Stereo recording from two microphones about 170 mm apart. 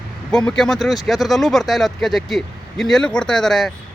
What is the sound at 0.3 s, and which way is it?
Speech, 5° left (ahead or behind).